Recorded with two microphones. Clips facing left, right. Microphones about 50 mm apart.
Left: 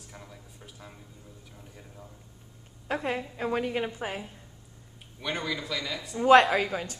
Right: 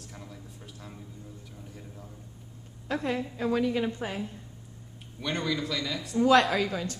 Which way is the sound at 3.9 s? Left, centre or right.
Centre.